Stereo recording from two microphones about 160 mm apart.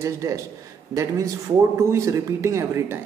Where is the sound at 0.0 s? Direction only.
20° right (ahead or behind).